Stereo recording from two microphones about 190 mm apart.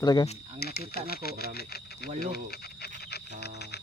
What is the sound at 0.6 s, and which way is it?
Speech, 55° left (ahead or behind).